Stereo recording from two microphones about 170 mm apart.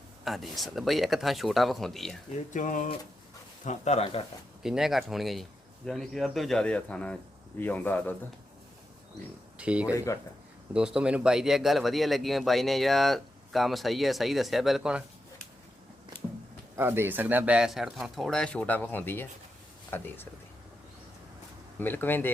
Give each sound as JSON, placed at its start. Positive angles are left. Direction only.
{"t": 0.3, "sound": "speech", "side_deg": 0}
{"t": 2.5, "sound": "speech", "side_deg": 50}
{"t": 4.6, "sound": "speech", "side_deg": 0}
{"t": 9.6, "sound": "speech", "side_deg": -5}
{"t": 16.7, "sound": "speech", "side_deg": -15}
{"t": 21.8, "sound": "speech", "side_deg": 10}